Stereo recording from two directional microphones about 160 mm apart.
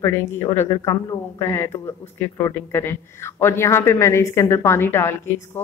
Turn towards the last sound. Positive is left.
turn(degrees=15)  # may be behind; listen again after turning